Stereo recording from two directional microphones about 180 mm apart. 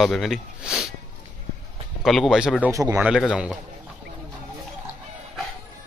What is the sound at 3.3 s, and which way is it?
Speech, 5° right (ahead or behind).